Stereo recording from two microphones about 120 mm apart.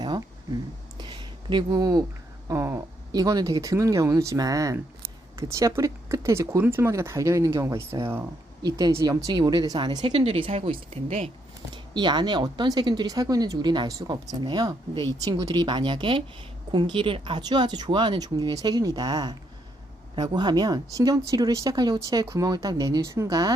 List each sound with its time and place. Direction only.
0.9 s a sound: 40° right (ahead or behind)
2.5 s speech: 30° right (ahead or behind)
8.6 s speech: 35° right (ahead or behind)
10.2 s speech: 55° right (ahead or behind)
11.7 s speech: 40° right (ahead or behind)